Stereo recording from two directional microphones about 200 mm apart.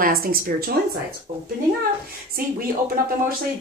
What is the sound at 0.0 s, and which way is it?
Speech, 50° right (ahead or behind).